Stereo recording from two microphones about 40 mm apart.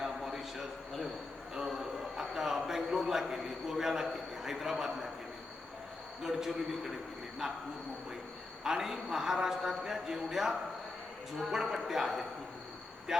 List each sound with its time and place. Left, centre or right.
0.0 s a sound: centre
6.2 s a man's voice: centre
8.6 s a man's voice: centre